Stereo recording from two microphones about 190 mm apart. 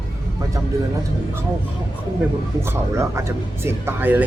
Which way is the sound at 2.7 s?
15° right (ahead or behind).